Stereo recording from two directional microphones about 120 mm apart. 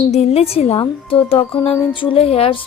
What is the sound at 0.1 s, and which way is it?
Speech, 60° left (ahead or behind).